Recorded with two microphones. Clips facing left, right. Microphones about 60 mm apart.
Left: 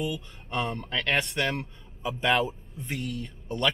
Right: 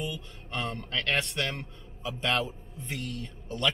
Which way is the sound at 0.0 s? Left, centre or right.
Centre.